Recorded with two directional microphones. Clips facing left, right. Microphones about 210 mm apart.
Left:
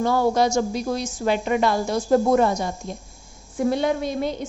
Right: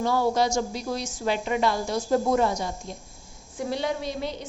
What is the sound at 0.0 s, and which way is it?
A woman's voice, 50° left (ahead or behind).